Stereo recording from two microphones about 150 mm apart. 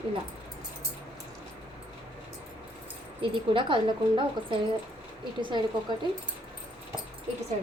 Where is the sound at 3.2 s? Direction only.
35° right (ahead or behind).